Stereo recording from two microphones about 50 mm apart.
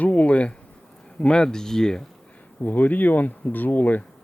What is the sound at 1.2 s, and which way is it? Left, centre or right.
Speech, centre.